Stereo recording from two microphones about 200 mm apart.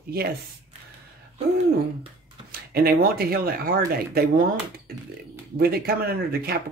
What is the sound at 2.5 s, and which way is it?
Speech, 50° right (ahead or behind).